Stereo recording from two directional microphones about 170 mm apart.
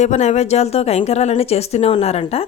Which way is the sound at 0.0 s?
40° left (ahead or behind).